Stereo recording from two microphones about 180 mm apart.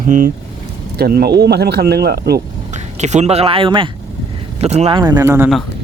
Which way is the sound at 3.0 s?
40° right (ahead or behind).